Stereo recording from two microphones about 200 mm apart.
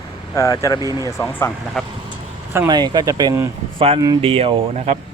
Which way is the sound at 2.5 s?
15° right (ahead or behind).